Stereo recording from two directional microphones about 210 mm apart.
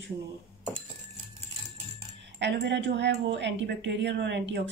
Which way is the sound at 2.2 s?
55° right (ahead or behind).